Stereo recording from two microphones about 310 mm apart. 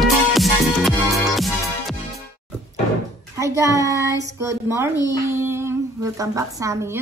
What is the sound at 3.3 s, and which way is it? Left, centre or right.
A child's voice, centre.